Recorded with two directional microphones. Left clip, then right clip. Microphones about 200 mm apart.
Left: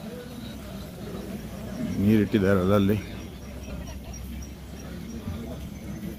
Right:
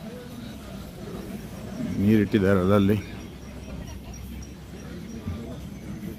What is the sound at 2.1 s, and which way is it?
Speech, 15° right (ahead or behind).